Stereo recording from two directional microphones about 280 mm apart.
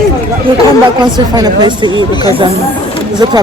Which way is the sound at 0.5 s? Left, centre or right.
Centre.